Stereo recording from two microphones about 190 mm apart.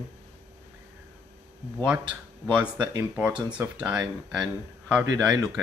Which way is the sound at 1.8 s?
5° right (ahead or behind).